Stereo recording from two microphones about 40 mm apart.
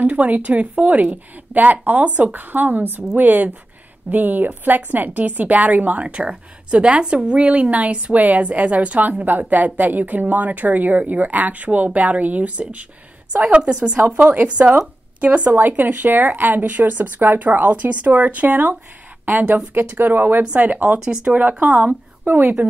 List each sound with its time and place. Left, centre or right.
0.0 s a woman's voice: right
9.1 s a woman's voice: right
13.9 s speech: right
14.2 s a woman's voice: right
15.5 s speech: right
20.5 s a woman's voice: right
21.0 s a woman's voice: right
22.2 s speech: right